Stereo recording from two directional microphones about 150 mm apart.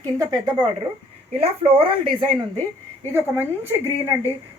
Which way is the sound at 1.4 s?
40° right (ahead or behind).